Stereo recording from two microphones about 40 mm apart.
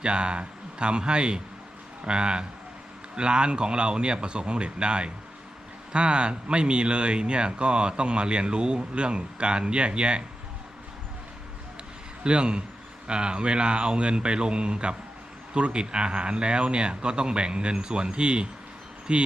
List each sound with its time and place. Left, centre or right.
0.0 s speech: right
12.2 s speech: right